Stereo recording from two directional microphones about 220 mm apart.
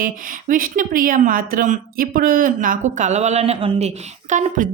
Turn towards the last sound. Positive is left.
turn(degrees=-35)  # may be behind; listen again after turning